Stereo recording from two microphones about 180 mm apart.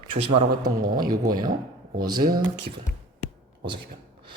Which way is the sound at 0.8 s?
55° right (ahead or behind).